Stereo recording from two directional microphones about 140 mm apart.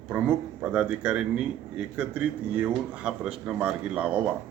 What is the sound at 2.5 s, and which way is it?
A man's voice, 10° right (ahead or behind).